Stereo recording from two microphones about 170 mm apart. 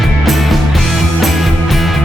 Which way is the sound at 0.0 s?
Centre (ahead or behind).